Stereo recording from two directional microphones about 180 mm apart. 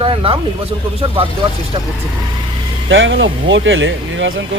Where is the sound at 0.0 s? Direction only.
30° right (ahead or behind).